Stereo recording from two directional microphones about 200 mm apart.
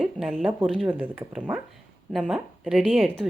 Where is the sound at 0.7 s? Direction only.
5° right (ahead or behind).